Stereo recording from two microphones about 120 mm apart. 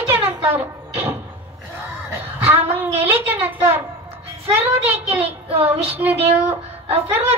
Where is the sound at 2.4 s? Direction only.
15° right (ahead or behind).